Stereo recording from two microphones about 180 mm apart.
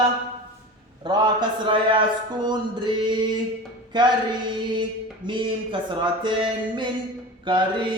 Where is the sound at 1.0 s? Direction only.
25° right (ahead or behind).